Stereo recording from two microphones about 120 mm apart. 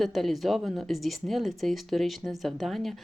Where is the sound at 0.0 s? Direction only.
Centre (ahead or behind).